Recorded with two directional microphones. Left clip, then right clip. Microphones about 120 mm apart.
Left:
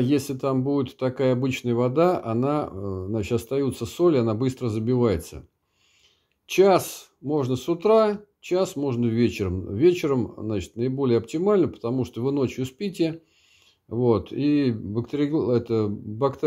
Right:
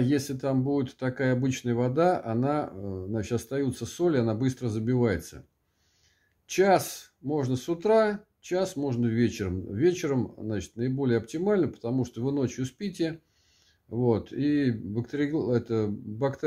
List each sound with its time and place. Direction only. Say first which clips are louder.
0.0 s speech: left 4 dB; 15° left (ahead or behind)
6.4 s speech: left 4 dB; 15° left (ahead or behind)